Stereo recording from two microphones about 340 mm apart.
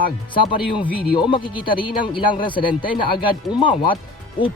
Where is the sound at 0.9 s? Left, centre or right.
Left.